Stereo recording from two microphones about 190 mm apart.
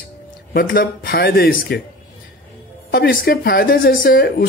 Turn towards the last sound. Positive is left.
turn(degrees=55)  # may be behind; listen again after turning